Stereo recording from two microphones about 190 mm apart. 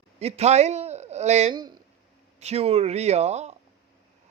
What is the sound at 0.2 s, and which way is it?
A man's voice, 35° right (ahead or behind).